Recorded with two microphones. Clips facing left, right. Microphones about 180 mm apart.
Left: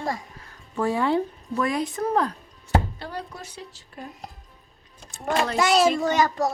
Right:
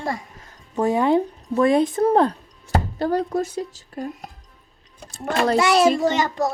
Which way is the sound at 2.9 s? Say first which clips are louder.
Right 14 dB; 45° right (ahead or behind).